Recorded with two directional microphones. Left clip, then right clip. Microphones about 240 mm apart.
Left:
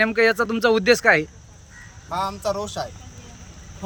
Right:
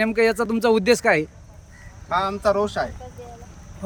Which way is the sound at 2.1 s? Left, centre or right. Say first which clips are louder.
Right 4 dB; left.